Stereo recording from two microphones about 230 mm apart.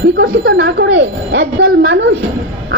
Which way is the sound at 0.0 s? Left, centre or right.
Right.